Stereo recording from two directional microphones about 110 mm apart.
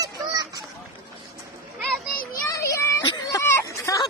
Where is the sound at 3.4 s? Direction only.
25° left (ahead or behind).